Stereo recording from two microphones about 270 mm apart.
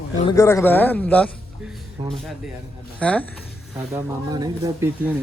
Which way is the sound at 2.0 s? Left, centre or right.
Centre.